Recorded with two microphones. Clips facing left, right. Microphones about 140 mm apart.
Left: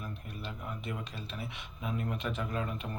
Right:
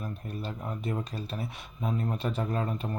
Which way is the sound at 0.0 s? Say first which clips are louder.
Right 6 dB; 40° right (ahead or behind).